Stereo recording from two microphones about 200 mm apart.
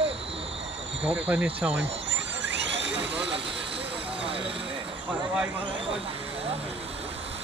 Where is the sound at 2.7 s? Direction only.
60° right (ahead or behind).